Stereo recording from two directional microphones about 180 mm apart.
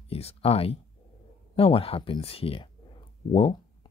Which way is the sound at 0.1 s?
35° left (ahead or behind).